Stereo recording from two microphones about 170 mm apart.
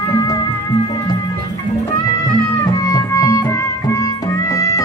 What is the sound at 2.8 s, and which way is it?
Music, 20° left (ahead or behind).